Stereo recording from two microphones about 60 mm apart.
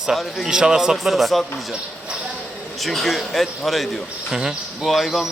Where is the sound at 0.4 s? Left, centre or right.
Centre.